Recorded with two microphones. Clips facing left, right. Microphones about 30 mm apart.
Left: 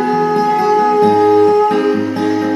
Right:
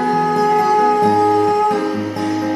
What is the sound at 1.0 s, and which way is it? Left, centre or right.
Music, left.